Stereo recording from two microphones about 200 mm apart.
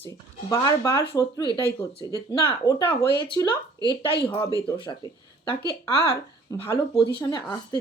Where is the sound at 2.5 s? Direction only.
20° left (ahead or behind).